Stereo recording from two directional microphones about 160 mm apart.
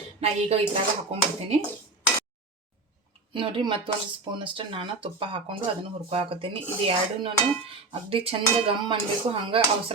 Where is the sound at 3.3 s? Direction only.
30° right (ahead or behind).